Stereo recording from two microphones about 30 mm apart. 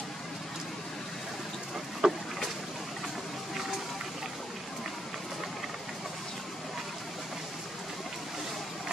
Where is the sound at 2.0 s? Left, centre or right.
Centre.